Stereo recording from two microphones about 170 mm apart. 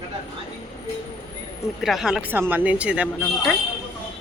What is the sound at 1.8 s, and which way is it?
Speech, centre (ahead or behind).